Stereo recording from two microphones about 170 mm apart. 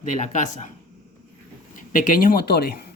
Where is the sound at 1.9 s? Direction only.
55° left (ahead or behind).